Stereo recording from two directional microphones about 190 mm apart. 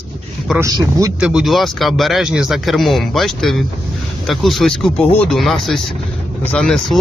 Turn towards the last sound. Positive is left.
turn(degrees=5)  # may be behind; listen again after turning